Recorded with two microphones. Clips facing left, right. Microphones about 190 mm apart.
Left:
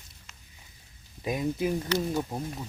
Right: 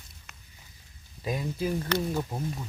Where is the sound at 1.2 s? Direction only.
20° left (ahead or behind).